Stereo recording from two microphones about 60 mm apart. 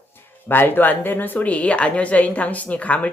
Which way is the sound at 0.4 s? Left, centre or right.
Left.